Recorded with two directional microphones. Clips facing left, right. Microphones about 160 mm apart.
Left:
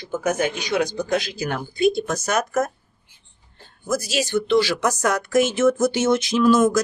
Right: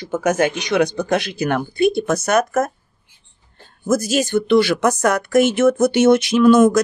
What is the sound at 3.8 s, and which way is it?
Speech, 50° right (ahead or behind).